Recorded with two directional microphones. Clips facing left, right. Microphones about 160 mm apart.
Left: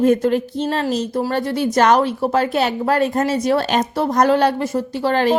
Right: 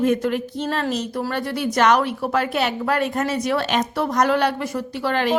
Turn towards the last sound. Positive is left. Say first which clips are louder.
# left 4 dB
turn(degrees=35)  # may be behind; listen again after turning